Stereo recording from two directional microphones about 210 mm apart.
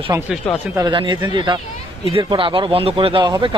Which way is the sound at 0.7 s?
20° right (ahead or behind).